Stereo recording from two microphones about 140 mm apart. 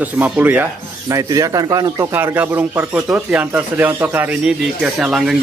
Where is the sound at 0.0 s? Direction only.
10° right (ahead or behind).